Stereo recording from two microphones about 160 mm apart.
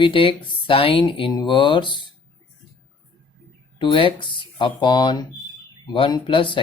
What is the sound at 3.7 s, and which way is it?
Speech, 30° left (ahead or behind).